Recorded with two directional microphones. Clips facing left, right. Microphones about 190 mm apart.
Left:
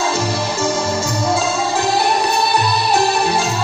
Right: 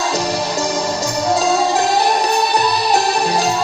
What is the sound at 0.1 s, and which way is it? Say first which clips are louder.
Music: right 1 dB; 40° right (ahead or behind).